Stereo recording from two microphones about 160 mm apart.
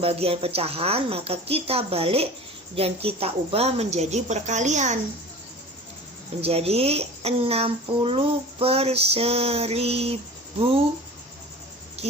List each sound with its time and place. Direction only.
0.0 s a woman's voice: 35° right (ahead or behind)
6.4 s speech: 40° right (ahead or behind)